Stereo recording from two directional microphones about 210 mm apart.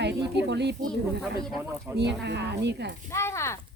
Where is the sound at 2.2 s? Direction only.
55° right (ahead or behind).